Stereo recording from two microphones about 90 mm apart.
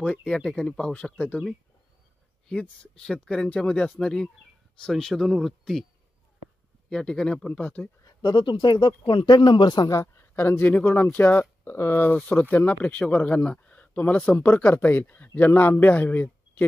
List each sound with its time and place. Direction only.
0.0 s speech: 10° left (ahead or behind)
2.4 s speech: 10° left (ahead or behind)
6.9 s speech: 10° left (ahead or behind)
8.0 s speech: 50° left (ahead or behind)
9.9 s speech: 25° left (ahead or behind)